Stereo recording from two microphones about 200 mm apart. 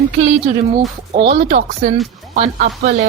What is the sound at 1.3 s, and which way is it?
A woman's voice, 35° right (ahead or behind).